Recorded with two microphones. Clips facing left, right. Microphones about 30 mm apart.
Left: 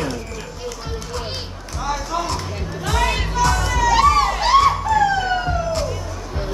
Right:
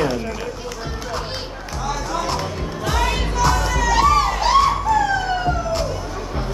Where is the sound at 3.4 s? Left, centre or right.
Centre.